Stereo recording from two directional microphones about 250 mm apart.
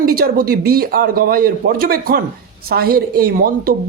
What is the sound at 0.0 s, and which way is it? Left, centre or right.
A man's voice, right.